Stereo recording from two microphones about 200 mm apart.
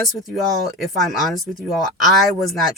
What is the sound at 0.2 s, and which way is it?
Speech, centre (ahead or behind).